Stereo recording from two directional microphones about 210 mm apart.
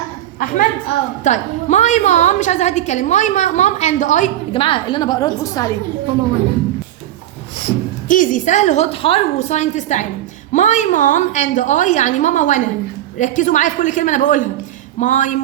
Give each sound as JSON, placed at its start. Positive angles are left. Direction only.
{"t": 0.3, "sound": "a woman's voice", "side_deg": 40}
{"t": 8.0, "sound": "a woman's voice", "side_deg": 40}